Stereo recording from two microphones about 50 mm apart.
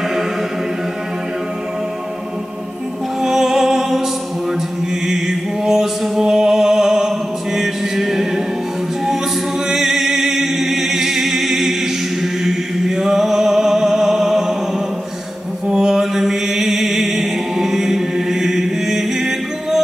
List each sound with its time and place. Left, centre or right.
3.2 s music: centre
5.0 s music: centre
9.7 s music: centre
12.2 s chant: centre
15.6 s mantra: centre